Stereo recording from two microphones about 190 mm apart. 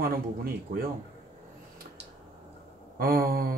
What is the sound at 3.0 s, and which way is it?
Speech, 50° right (ahead or behind).